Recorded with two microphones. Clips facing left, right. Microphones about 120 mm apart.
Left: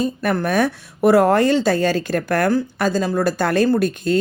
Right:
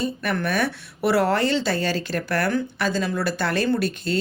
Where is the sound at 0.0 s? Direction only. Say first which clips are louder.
Left 5 dB; 40° left (ahead or behind).